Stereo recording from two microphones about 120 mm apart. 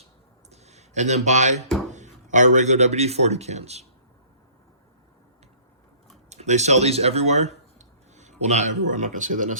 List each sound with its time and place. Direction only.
0.5 s a sound: 70° right (ahead or behind)
1.9 s a man's voice: 90° right; by 3.8 s 65° right (ahead or behind)
6.3 s speech: 75° right (ahead or behind); by 9.6 s 90° right